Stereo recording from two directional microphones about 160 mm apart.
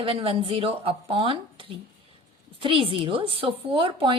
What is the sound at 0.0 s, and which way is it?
A woman's voice, 35° right (ahead or behind).